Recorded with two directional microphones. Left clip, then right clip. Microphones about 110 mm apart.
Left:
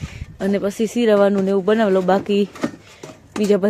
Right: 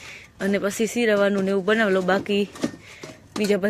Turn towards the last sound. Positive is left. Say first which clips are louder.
# left 5 dB
turn(degrees=45)  # may be behind; listen again after turning